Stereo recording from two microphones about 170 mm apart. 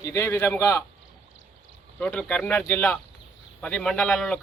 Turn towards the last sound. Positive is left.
turn(degrees=5)  # may be behind; listen again after turning